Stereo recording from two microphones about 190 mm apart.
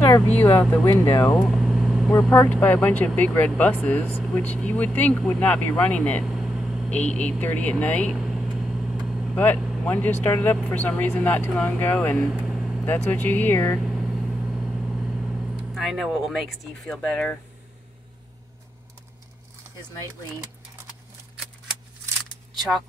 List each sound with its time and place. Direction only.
0.1 s speech: 15° left (ahead or behind)
1.3 s vehicle: centre (ahead or behind)
2.3 s speech: 10° left (ahead or behind)
7.8 s vehicle: 5° left (ahead or behind)
9.8 s speech: 10° left (ahead or behind)
12.3 s vehicle: centre (ahead or behind)
12.8 s speech: 10° left (ahead or behind)
13.7 s vehicle: centre (ahead or behind)
22.6 s speech: centre (ahead or behind)